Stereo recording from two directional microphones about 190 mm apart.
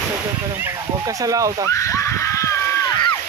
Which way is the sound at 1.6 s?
15° left (ahead or behind).